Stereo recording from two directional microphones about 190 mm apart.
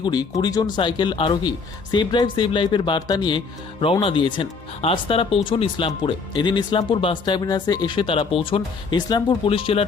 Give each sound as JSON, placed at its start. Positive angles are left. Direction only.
{"t": 0.0, "sound": "speech", "side_deg": 20}